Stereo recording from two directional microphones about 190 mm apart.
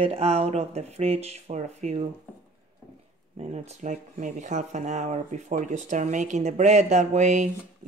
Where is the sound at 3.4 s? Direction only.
35° right (ahead or behind).